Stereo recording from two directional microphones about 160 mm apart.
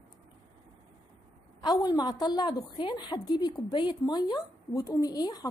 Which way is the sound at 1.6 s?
25° left (ahead or behind).